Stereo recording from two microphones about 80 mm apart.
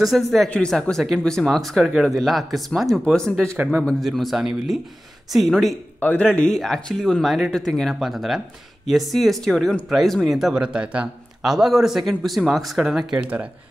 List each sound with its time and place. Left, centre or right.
0.0 s speech: centre
5.9 s a man's voice: centre
6.5 s speech: centre
11.4 s speech: centre
13.1 s speech: centre